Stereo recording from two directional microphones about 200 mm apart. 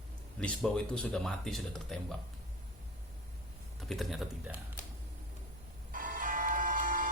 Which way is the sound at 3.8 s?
Centre (ahead or behind).